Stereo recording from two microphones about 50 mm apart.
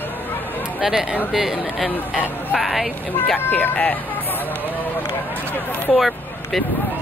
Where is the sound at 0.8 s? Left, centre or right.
Centre.